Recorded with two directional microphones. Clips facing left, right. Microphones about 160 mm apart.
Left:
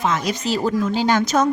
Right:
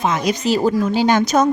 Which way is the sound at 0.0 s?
15° right (ahead or behind).